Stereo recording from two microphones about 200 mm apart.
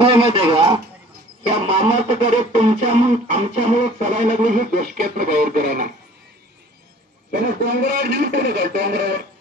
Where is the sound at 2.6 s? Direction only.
35° right (ahead or behind).